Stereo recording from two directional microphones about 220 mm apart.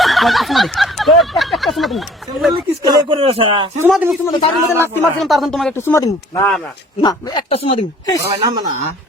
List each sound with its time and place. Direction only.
0.0 s a sound: centre (ahead or behind)
2.8 s speech: 20° right (ahead or behind)
3.8 s speech: 5° right (ahead or behind)
4.3 s speech: 25° left (ahead or behind)
4.8 s speech: 5° left (ahead or behind); by 8.2 s 20° left (ahead or behind)
8.2 s speech: 15° right (ahead or behind)